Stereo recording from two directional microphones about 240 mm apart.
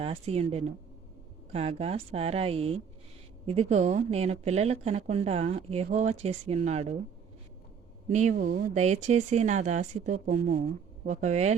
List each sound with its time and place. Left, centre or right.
0.0 s a woman's voice: right
8.1 s speech: right